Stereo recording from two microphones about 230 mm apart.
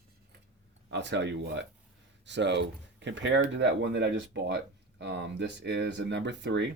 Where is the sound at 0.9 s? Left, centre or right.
Right.